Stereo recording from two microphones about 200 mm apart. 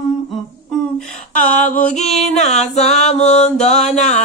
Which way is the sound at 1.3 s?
40° left (ahead or behind).